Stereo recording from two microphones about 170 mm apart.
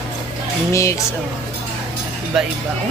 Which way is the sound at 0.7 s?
15° left (ahead or behind).